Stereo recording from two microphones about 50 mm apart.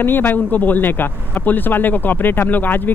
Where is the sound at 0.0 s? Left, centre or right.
Left.